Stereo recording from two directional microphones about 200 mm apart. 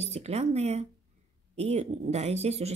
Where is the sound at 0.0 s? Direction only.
30° right (ahead or behind).